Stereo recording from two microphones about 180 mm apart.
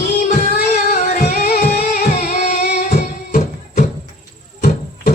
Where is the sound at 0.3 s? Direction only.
40° left (ahead or behind).